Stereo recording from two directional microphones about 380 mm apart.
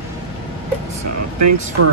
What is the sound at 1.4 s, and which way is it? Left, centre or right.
Speech, right.